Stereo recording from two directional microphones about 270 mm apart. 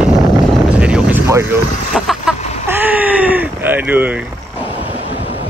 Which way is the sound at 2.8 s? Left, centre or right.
Centre.